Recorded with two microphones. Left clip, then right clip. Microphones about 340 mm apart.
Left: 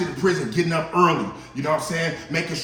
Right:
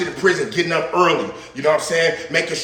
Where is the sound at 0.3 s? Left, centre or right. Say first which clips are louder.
Right 5 dB; centre.